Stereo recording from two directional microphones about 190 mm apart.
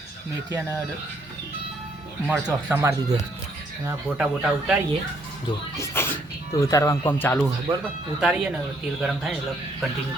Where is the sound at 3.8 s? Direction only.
5° right (ahead or behind).